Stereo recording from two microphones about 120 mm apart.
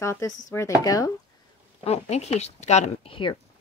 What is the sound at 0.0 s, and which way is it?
Speech, 25° left (ahead or behind).